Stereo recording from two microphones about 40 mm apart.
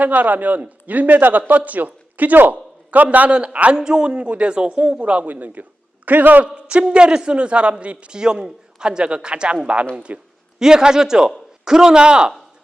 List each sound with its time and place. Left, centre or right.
0.0 s a man's voice: right
3.2 s a man's voice: right
5.3 s a man's voice: right
6.4 s a man's voice: right
8.2 s a man's voice: centre
10.6 s a man's voice: centre